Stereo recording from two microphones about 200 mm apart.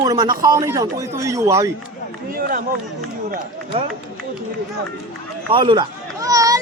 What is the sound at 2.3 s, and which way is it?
Speech, 45° right (ahead or behind).